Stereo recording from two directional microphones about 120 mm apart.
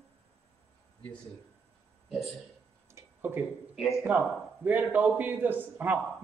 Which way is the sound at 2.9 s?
20° right (ahead or behind).